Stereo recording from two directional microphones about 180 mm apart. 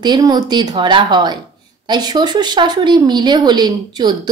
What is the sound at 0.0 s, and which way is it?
Speech, 20° right (ahead or behind).